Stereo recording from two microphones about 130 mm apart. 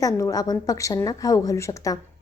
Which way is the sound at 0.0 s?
25° left (ahead or behind).